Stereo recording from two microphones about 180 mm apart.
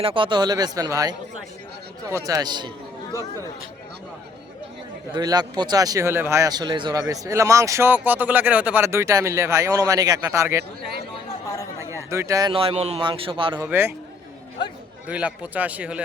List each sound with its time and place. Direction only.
0.0 s speech: 30° right (ahead or behind)
5.1 s speech: 20° right (ahead or behind)
11.5 s chatter: 20° left (ahead or behind)
12.1 s speech: 20° right (ahead or behind)
13.6 s speech: 10° right (ahead or behind)
15.0 s speech: 5° right (ahead or behind)